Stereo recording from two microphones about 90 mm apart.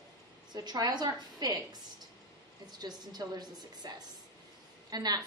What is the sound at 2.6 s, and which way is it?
A woman's voice, 50° right (ahead or behind).